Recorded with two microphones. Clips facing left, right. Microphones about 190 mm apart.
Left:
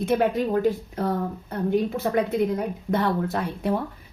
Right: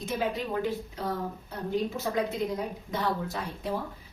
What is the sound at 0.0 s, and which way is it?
Speech, 60° left (ahead or behind).